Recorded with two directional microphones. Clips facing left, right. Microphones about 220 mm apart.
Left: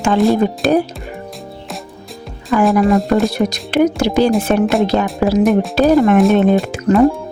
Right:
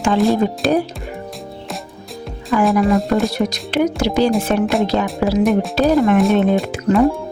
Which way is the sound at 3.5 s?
50° left (ahead or behind).